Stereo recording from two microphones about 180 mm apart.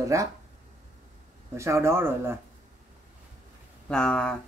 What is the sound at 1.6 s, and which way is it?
Speech, 15° right (ahead or behind).